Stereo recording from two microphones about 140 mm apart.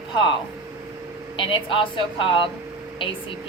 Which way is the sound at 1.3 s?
40° left (ahead or behind).